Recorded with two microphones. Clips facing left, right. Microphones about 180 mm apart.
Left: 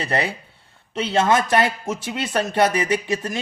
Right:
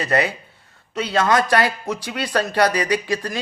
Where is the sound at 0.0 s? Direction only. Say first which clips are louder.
Right 3 dB; 25° left (ahead or behind).